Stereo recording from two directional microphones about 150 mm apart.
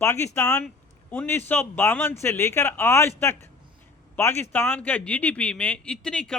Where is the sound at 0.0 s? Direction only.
15° left (ahead or behind).